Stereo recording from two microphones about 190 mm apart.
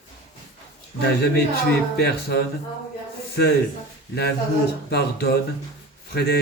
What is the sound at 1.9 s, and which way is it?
Speech, 55° left (ahead or behind).